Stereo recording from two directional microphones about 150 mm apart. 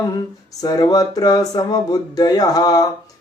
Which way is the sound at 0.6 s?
25° left (ahead or behind).